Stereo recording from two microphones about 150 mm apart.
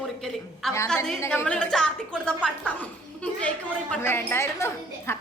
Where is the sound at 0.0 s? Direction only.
Centre (ahead or behind).